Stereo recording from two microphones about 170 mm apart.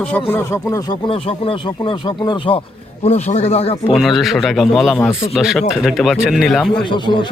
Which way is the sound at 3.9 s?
Centre (ahead or behind).